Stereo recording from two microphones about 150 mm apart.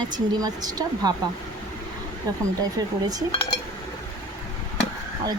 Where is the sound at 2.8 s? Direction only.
25° right (ahead or behind).